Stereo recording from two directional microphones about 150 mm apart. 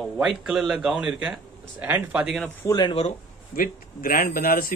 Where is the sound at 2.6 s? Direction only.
25° left (ahead or behind).